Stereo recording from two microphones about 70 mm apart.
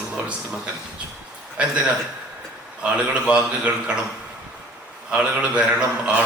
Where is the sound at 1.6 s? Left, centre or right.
Centre.